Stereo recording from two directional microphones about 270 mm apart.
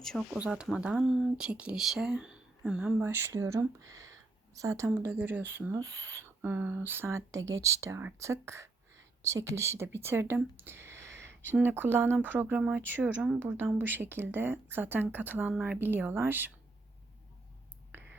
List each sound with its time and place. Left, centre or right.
0.0 s speech: centre
11.1 s a sound: right
11.4 s speech: centre
17.9 s whispering: centre